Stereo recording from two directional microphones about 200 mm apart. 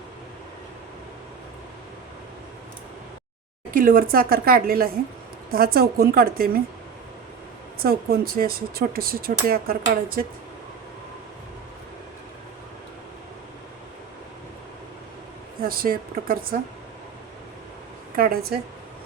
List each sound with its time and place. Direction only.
3.8 s speech: 45° right (ahead or behind)
7.8 s speech: 50° right (ahead or behind)
15.6 s speech: 45° right (ahead or behind)
18.2 s speech: 50° right (ahead or behind)